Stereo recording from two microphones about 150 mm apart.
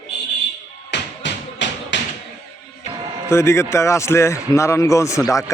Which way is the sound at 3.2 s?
15° left (ahead or behind).